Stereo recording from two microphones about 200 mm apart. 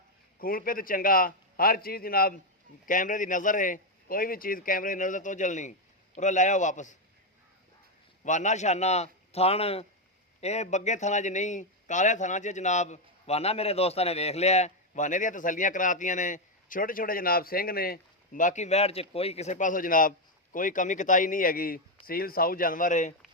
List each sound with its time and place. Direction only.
0.3 s a man's voice: 45° left (ahead or behind)
8.2 s a man's voice: 35° left (ahead or behind)